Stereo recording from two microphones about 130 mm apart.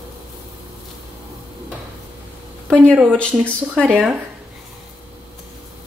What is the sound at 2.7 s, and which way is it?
Speech, 10° left (ahead or behind).